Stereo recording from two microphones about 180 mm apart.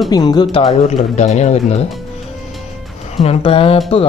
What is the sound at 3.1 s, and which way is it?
Speech, 35° left (ahead or behind).